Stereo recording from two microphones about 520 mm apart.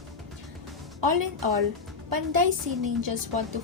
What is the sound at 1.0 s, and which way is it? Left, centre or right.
A woman's voice, right.